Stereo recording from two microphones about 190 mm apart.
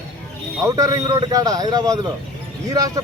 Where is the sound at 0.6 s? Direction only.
20° right (ahead or behind).